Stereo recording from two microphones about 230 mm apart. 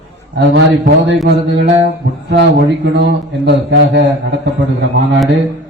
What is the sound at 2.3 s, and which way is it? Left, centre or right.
Speech, right.